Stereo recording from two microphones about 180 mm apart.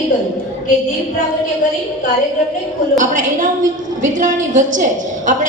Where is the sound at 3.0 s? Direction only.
45° right (ahead or behind).